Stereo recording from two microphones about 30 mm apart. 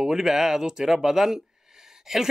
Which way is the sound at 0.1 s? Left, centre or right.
Centre.